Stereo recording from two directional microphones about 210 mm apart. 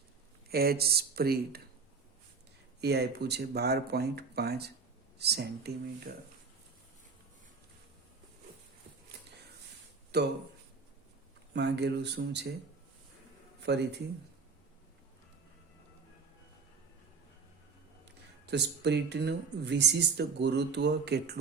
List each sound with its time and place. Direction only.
0.5 s speech: 45° right (ahead or behind)
2.8 s speech: 50° right (ahead or behind)
10.1 s speech: 50° right (ahead or behind)
11.5 s speech: 55° right (ahead or behind)
13.6 s a man's voice: 55° right (ahead or behind)
18.5 s speech: 55° right (ahead or behind)